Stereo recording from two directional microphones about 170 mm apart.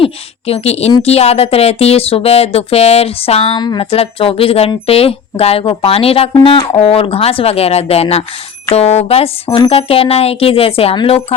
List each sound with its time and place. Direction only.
0.0 s speech: 35° left (ahead or behind)